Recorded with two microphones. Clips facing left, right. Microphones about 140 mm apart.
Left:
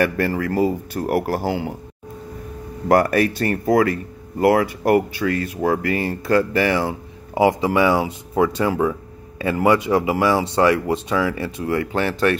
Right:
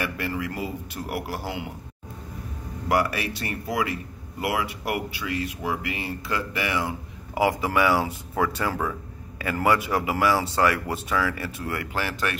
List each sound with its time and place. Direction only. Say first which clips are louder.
0.0 s speech: left 9 dB; 45° left (ahead or behind)
2.9 s speech: left 8 dB; 45° left (ahead or behind)